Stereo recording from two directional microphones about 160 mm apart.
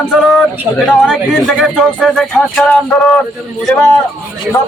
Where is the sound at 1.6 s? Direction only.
Centre (ahead or behind).